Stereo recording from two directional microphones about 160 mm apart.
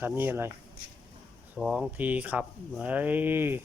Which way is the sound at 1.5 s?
Centre (ahead or behind).